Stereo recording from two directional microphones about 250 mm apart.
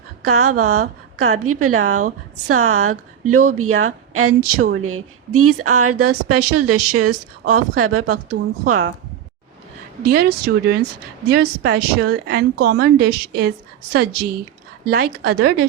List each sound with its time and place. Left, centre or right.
0.3 s a woman's voice: right
4.6 s a woman's voice: right
10.0 s speech: right